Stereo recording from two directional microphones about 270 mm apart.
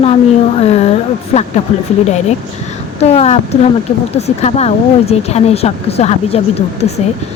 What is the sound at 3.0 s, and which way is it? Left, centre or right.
Speech, left.